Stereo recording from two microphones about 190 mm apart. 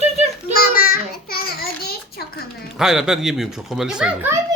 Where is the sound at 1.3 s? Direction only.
55° left (ahead or behind).